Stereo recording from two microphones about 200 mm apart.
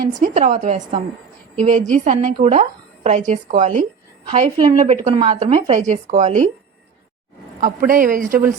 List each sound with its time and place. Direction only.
0.1 s a woman's voice: 40° right (ahead or behind)
7.6 s speech: 40° right (ahead or behind)